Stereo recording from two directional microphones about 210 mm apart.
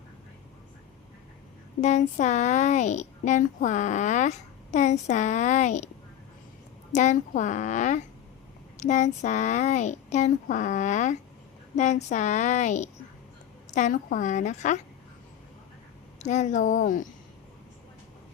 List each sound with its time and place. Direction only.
1.8 s a woman's voice: 35° left (ahead or behind)
6.9 s a woman's voice: 35° left (ahead or behind)
16.1 s a woman's voice: 35° left (ahead or behind)